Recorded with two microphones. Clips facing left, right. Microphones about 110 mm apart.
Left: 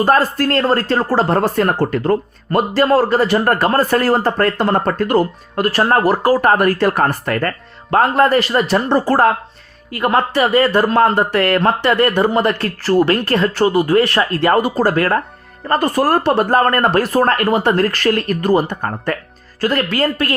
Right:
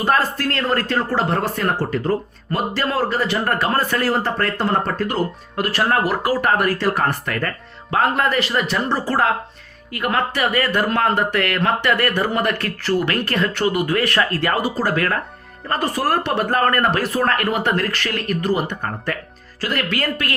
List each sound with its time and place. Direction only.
0.0 s speech: 40° left (ahead or behind)
2.7 s speech: 40° left (ahead or behind)
8.9 s speech: 50° left (ahead or behind)
9.9 s speech: 30° left (ahead or behind)
14.5 s speech: 45° left (ahead or behind)
14.9 s speech: 35° left (ahead or behind)
15.7 s speech: 45° left (ahead or behind)